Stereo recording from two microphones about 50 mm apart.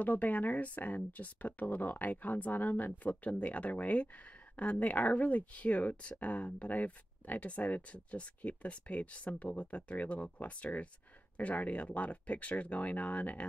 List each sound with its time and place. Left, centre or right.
0.0 s speech: left